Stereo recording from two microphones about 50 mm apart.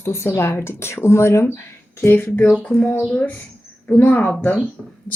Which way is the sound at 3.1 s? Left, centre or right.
Left.